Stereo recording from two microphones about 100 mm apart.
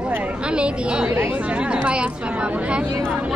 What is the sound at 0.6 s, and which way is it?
A woman's voice, 10° right (ahead or behind).